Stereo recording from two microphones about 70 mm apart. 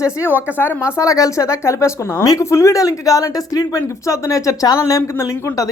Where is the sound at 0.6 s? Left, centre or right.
Left.